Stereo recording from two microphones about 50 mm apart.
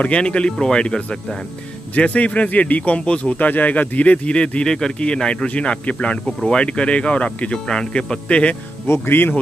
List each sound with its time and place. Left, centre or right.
0.0 s speech: left
2.0 s speech: left
7.5 s speech: centre
8.8 s speech: left